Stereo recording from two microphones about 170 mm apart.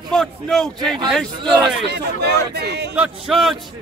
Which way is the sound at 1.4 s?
25° right (ahead or behind).